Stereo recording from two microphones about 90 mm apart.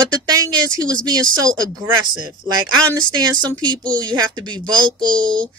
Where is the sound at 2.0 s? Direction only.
55° right (ahead or behind).